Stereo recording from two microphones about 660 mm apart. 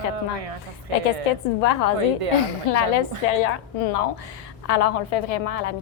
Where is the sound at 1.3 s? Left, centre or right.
Left.